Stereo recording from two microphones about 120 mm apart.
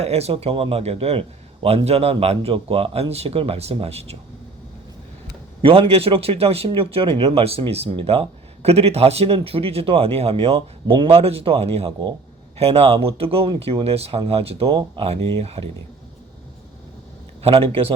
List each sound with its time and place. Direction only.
0.0 s a man's voice: 60° right (ahead or behind)
5.6 s a man's voice: 50° right (ahead or behind)
17.4 s speech: 55° right (ahead or behind)